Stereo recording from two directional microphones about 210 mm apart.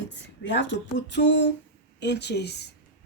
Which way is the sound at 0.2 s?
55° left (ahead or behind).